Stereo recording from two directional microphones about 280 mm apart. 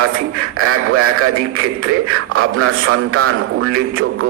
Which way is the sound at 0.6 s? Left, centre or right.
Right.